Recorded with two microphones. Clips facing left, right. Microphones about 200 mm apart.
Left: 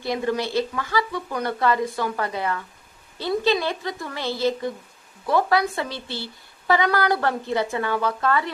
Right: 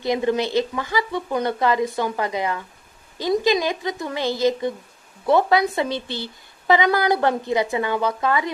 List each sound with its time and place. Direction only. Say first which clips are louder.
0.0 s a woman's voice: right 4 dB; 20° right (ahead or behind)